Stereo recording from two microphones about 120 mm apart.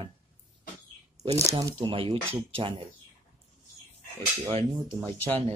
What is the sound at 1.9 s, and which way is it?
Speech, 50° right (ahead or behind).